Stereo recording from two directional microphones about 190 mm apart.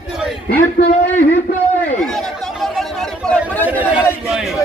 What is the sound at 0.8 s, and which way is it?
Speech, 50° left (ahead or behind).